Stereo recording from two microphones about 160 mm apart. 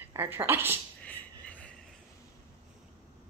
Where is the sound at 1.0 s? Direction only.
10° left (ahead or behind).